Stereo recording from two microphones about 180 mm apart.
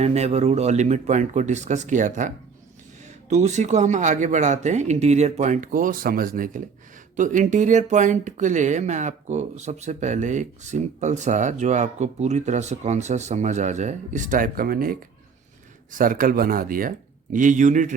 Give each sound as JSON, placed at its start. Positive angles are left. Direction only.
{"t": 0.0, "sound": "speech", "side_deg": -35}